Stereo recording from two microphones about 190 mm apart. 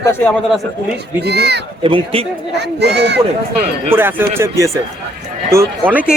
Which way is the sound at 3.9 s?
10° right (ahead or behind).